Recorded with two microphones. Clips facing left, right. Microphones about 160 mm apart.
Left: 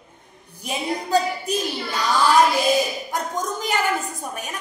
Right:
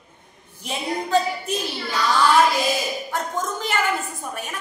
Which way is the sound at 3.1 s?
15° left (ahead or behind).